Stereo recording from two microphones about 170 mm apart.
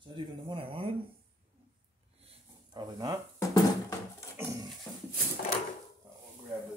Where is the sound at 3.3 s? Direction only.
20° left (ahead or behind).